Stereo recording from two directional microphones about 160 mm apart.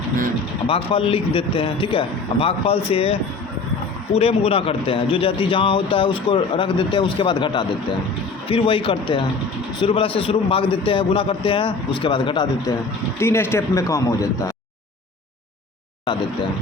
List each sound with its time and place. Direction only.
0.7 s a man's voice: 35° left (ahead or behind)
13.1 s speech: 15° left (ahead or behind)